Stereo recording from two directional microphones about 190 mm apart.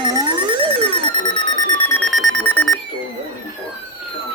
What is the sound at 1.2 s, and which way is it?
Alarm clock, 25° left (ahead or behind).